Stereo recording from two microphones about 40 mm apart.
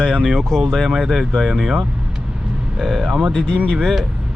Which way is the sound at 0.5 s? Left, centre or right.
Centre.